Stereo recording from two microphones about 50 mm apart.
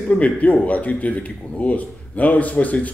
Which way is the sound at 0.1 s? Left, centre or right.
Left.